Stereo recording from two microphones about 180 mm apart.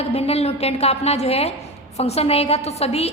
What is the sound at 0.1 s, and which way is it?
A woman's voice, 35° left (ahead or behind).